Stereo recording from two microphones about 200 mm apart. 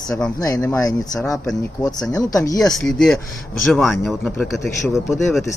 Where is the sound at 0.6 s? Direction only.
15° left (ahead or behind).